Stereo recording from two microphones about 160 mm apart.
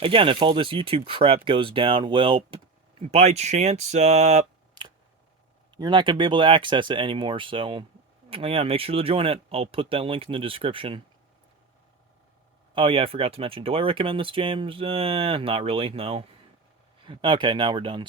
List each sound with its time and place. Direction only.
0.0 s speech: 35° right (ahead or behind)
5.7 s speech: 30° right (ahead or behind)
12.7 s speech: 35° right (ahead or behind)